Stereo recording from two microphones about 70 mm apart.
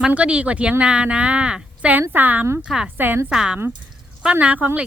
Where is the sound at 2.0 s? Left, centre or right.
Right.